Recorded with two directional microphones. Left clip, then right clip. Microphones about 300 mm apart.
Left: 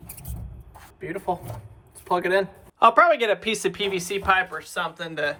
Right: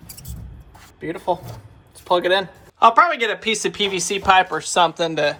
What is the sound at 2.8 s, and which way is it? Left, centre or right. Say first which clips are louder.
Speech: right 2 dB; centre.